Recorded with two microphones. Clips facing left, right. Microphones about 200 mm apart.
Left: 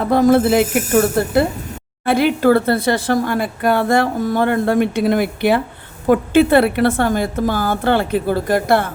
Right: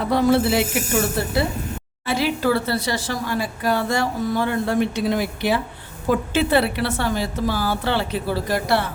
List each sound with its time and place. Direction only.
0.1 s a woman's voice: 50° left (ahead or behind)